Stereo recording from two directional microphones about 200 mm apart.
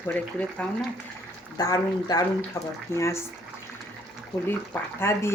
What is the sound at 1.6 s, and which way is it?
Speech, 20° left (ahead or behind).